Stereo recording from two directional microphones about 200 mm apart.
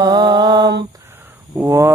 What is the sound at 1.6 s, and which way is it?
Crow, 15° right (ahead or behind).